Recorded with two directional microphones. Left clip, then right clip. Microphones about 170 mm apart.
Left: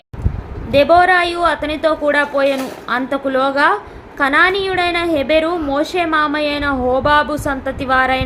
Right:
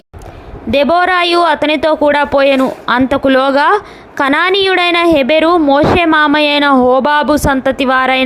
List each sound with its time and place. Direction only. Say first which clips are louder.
0.7 s a woman's voice: even; 55° right (ahead or behind)